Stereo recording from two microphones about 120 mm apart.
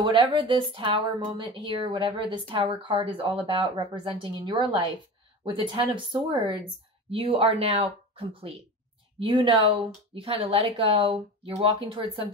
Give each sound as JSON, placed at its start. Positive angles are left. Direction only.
{"t": 0.0, "sound": "speech", "side_deg": -45}